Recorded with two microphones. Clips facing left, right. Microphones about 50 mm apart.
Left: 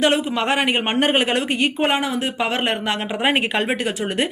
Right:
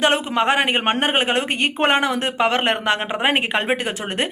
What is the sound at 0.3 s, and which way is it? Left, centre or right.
A woman's voice, right.